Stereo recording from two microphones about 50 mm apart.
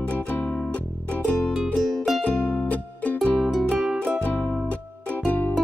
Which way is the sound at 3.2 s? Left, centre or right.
Left.